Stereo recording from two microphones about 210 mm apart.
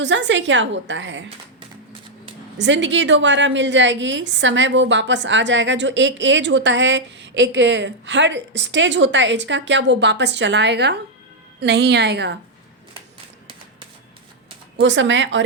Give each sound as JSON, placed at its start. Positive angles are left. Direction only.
{"t": 0.0, "sound": "a woman's voice", "side_deg": -60}
{"t": 2.6, "sound": "a woman's voice", "side_deg": -60}
{"t": 14.8, "sound": "a woman's voice", "side_deg": -60}